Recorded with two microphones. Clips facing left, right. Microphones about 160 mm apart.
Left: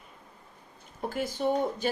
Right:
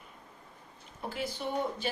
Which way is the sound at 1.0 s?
45° left (ahead or behind).